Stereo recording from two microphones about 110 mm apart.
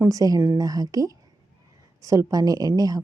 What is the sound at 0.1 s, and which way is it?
A woman's voice, 35° right (ahead or behind).